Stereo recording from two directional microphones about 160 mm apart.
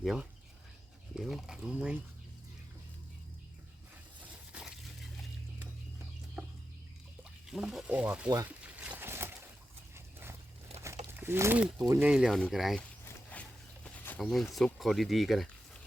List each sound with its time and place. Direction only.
0.0 s speech: centre (ahead or behind)
4.2 s a sound: 5° right (ahead or behind)
6.4 s a sound: 10° right (ahead or behind)
7.4 s speech: 5° right (ahead or behind)
8.4 s boat: 10° right (ahead or behind)
9.9 s horse: 15° right (ahead or behind)
11.2 s speech: 15° right (ahead or behind)
13.3 s walk: 10° left (ahead or behind)
13.8 s a sound: 10° left (ahead or behind)
14.2 s speech: centre (ahead or behind)